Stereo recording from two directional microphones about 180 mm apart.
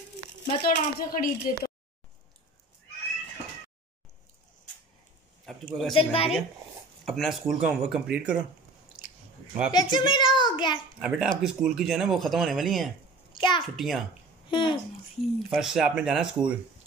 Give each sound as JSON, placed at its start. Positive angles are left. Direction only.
{"t": 0.5, "sound": "a woman's voice", "side_deg": 55}
{"t": 5.4, "sound": "a man's voice", "side_deg": 0}
{"t": 5.9, "sound": "a woman's voice", "side_deg": 30}
{"t": 7.1, "sound": "speech", "side_deg": 0}
{"t": 8.8, "sound": "chewing", "side_deg": -5}
{"t": 9.7, "sound": "a child's voice", "side_deg": 25}
{"t": 11.0, "sound": "speech", "side_deg": -5}
{"t": 13.3, "sound": "a sound", "side_deg": 25}
{"t": 13.7, "sound": "speech", "side_deg": 0}
{"t": 14.5, "sound": "a child's voice", "side_deg": 25}
{"t": 15.3, "sound": "speech", "side_deg": 0}